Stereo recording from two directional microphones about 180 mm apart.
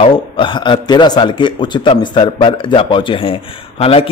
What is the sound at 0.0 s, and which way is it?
A man's voice, 25° left (ahead or behind).